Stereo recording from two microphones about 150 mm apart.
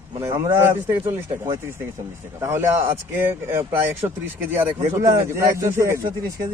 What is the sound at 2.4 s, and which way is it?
Speech, 15° right (ahead or behind).